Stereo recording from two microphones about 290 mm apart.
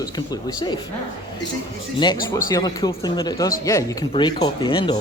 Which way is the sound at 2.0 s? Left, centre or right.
Centre.